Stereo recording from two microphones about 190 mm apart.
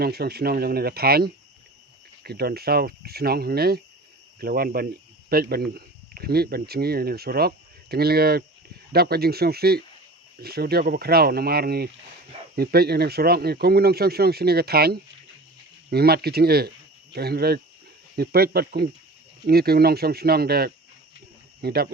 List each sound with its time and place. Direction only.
0.0 s speech: 55° right (ahead or behind)